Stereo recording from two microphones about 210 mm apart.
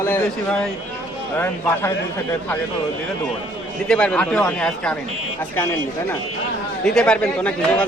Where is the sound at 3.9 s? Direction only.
5° left (ahead or behind).